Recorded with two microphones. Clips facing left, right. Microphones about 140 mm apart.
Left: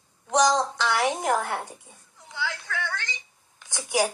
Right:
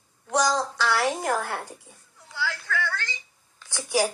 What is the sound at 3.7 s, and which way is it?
Speech, 15° left (ahead or behind).